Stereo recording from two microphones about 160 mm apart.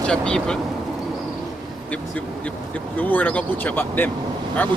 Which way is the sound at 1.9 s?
10° left (ahead or behind).